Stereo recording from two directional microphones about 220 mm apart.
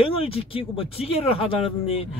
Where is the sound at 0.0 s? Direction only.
25° left (ahead or behind).